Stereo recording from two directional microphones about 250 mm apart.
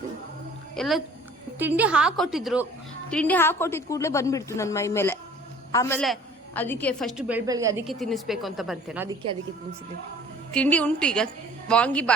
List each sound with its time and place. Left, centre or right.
0.8 s a woman's voice: centre
7.9 s a woman's voice: centre
10.5 s a woman's voice: centre